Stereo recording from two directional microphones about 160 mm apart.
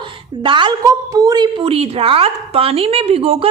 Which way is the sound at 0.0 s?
30° right (ahead or behind).